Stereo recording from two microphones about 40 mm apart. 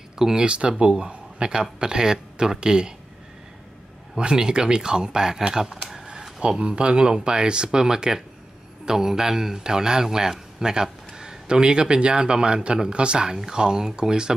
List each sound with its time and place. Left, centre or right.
0.2 s a man's voice: centre
0.5 s speech: right
4.2 s speech: right
5.5 s a sound: centre
6.6 s a man's voice: right
13.3 s a man's voice: centre